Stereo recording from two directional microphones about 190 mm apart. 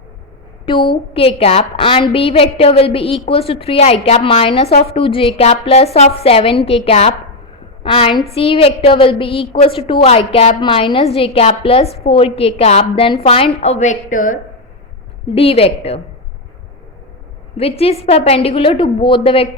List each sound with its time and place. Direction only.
0.7 s a woman's voice: 25° left (ahead or behind)
15.4 s a woman's voice: 30° left (ahead or behind)
17.6 s a woman's voice: 30° left (ahead or behind)